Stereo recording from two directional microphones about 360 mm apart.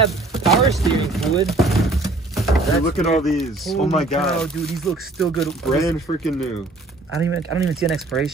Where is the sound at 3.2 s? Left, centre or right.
Centre.